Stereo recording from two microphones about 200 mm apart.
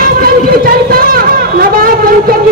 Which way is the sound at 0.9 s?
45° right (ahead or behind).